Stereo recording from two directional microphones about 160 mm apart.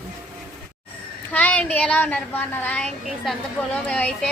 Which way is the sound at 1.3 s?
10° left (ahead or behind).